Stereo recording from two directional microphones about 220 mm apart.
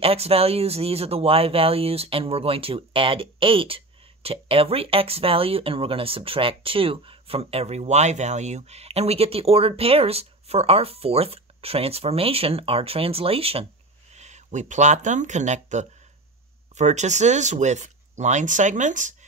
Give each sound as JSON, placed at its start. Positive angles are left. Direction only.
{"t": 0.0, "sound": "speech", "side_deg": -25}